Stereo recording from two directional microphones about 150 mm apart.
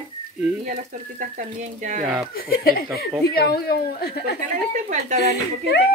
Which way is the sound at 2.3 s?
85° left.